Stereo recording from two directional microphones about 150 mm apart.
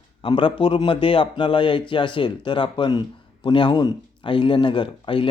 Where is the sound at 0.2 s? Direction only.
35° left (ahead or behind).